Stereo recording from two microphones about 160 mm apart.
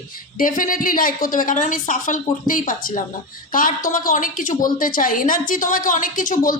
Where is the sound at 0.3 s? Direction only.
60° left (ahead or behind).